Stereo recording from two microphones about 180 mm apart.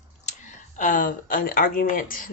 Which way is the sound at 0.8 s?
45° left (ahead or behind).